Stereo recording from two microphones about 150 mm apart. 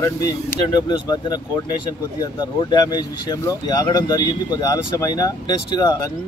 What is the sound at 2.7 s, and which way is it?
Speech, 25° left (ahead or behind).